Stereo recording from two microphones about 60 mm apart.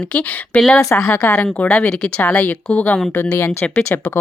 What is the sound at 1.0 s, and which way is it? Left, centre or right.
Speech, left.